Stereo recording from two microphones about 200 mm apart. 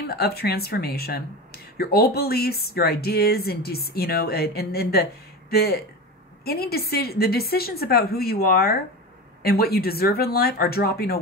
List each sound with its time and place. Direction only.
0.0 s speech: 50° left (ahead or behind)